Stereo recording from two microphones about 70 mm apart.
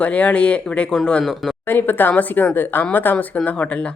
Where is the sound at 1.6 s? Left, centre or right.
Left.